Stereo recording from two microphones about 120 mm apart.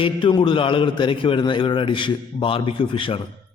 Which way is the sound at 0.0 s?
40° left (ahead or behind).